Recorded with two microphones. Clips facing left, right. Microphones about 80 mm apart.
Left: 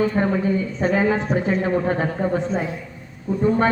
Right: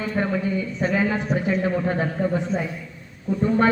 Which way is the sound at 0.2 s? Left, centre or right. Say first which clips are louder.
Left 3 dB; left.